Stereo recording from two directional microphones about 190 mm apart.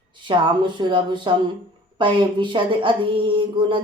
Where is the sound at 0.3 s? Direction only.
25° right (ahead or behind).